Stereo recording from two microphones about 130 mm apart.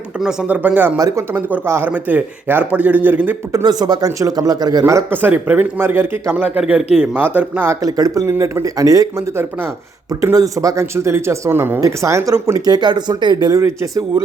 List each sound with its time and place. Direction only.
0.2 s speech: 10° right (ahead or behind)
0.9 s speech: 25° right (ahead or behind)
3.5 s speech: 30° right (ahead or behind)